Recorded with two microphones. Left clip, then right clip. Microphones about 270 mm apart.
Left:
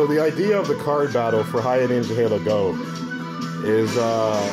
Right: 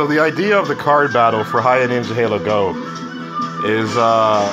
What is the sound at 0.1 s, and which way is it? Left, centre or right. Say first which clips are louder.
Speech: right 5 dB; centre.